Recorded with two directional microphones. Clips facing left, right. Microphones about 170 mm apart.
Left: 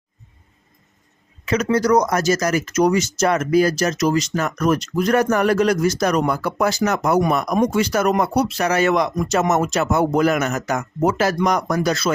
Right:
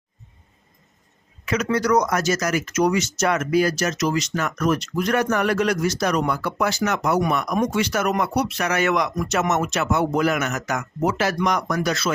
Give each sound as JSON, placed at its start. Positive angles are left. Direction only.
{"t": 1.7, "sound": "speech", "side_deg": 35}